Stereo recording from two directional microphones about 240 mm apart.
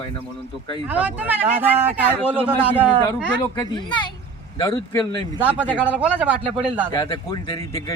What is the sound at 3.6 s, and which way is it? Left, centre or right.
Speech, centre.